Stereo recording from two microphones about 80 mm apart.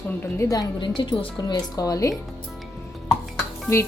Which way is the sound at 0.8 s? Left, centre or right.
Left.